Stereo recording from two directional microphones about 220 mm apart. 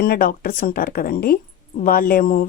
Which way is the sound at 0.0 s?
40° left (ahead or behind).